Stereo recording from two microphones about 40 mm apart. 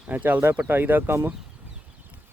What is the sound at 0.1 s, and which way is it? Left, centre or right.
Speech, right.